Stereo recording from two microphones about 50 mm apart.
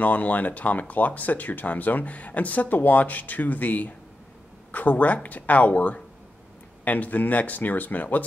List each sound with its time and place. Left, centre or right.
0.0 s speech: left